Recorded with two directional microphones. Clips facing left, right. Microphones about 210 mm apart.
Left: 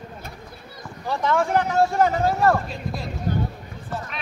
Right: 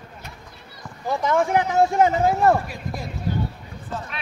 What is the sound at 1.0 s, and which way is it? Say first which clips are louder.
Speech: right 1 dB; 15° right (ahead or behind).